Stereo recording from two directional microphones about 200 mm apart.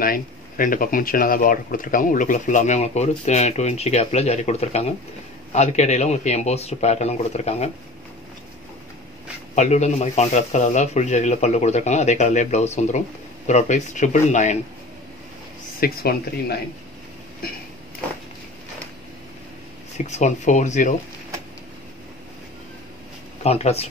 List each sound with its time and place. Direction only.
0.0 s speech: 45° left (ahead or behind)
9.6 s speech: 35° left (ahead or behind)
15.8 s speech: 50° left (ahead or behind)
20.0 s speech: 35° left (ahead or behind)
23.4 s speech: 30° left (ahead or behind)